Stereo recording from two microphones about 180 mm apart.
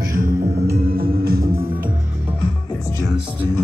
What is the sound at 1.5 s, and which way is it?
Music, 15° right (ahead or behind).